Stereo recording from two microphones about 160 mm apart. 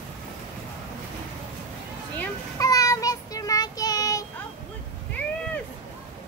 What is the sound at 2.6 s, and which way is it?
Child singing, 20° left (ahead or behind).